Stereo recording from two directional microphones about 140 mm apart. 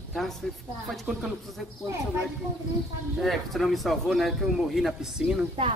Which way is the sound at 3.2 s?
Centre (ahead or behind).